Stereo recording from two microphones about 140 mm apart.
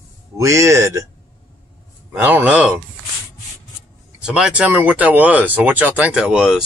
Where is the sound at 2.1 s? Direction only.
10° right (ahead or behind).